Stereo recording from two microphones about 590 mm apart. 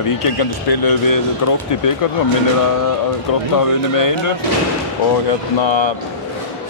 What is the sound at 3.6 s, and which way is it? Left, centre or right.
Speech, left.